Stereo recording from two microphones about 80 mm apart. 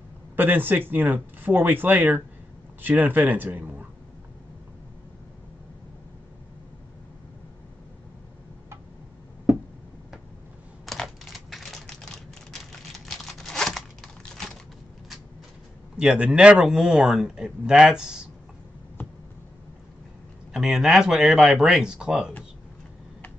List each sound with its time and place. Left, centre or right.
0.4 s speech: right
10.9 s typing: centre
13.0 s tearing: centre
16.0 s a man's voice: centre
20.5 s speech: centre